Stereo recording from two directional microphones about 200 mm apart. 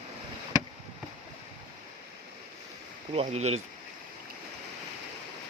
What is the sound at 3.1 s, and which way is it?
Speech, 30° right (ahead or behind).